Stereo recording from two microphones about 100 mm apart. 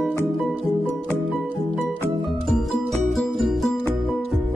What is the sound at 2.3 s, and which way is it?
Music, centre (ahead or behind).